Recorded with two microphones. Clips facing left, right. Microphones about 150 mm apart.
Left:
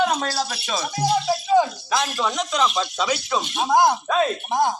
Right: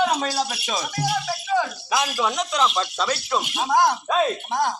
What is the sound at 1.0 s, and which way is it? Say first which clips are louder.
Speech: left 7 dB; 15° left (ahead or behind).